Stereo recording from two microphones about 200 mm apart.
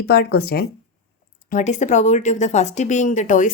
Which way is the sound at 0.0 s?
55° left (ahead or behind).